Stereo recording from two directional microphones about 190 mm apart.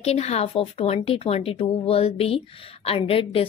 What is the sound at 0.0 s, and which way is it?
Speech, 35° left (ahead or behind).